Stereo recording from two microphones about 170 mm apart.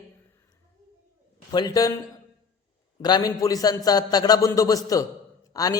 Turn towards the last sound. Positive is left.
turn(degrees=20)  # may be behind; listen again after turning